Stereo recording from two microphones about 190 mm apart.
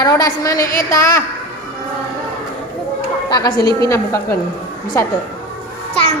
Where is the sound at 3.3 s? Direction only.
20° left (ahead or behind).